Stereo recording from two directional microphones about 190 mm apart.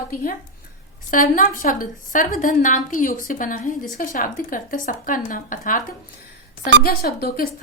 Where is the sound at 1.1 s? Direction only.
45° left (ahead or behind).